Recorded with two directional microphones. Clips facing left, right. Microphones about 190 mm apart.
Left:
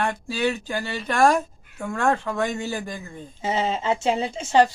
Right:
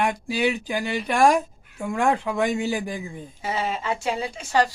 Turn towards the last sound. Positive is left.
turn(degrees=25)  # may be behind; listen again after turning